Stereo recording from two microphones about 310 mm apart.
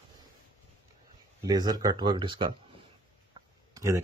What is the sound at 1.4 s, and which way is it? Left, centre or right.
Speech, centre.